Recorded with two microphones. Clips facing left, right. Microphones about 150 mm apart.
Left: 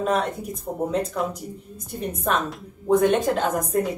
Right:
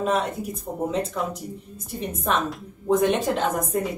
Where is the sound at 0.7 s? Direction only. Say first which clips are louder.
Left 2 dB; 10° left (ahead or behind).